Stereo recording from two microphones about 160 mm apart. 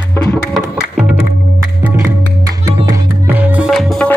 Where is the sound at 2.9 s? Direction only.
10° right (ahead or behind).